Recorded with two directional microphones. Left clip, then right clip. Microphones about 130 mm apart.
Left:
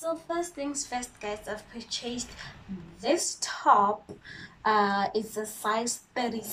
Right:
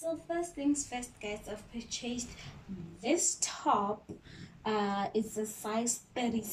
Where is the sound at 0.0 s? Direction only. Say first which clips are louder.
Left 4 dB; 25° right (ahead or behind).